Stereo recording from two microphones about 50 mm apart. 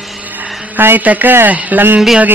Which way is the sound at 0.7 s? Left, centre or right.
Right.